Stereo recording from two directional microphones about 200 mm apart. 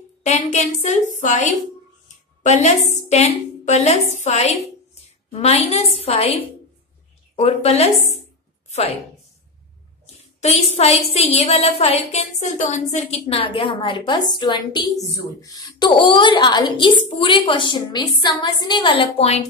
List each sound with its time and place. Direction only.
0.2 s a woman's voice: 35° left (ahead or behind)
8.6 s a sound: 30° left (ahead or behind)
10.4 s a woman's voice: 30° left (ahead or behind)